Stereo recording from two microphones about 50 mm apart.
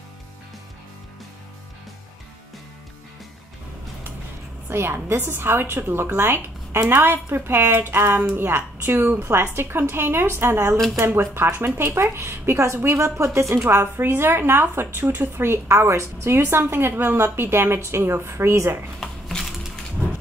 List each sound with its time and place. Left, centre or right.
4.6 s a woman's voice: right
9.2 s a woman's voice: right
13.7 s speech: right
15.7 s a woman's voice: right
16.3 s speech: right
17.7 s a woman's voice: right
18.9 s a sound: centre